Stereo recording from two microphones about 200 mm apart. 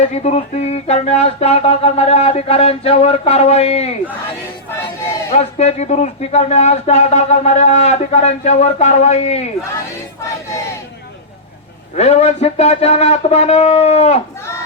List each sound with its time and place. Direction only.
0.0 s speech: 35° left (ahead or behind)
5.3 s speech: 35° left (ahead or behind)
11.9 s speech: 35° left (ahead or behind)